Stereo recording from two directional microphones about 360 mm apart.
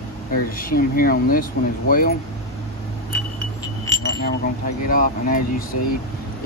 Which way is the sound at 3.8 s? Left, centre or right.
Centre.